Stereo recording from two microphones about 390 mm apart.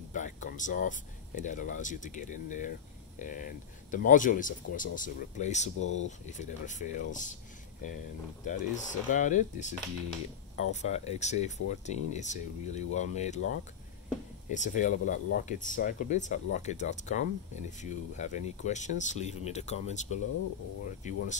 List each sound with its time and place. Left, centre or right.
0.1 s speech: centre
8.5 s speech: centre